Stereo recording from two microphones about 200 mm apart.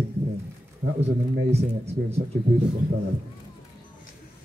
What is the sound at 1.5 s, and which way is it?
Speech, 30° right (ahead or behind).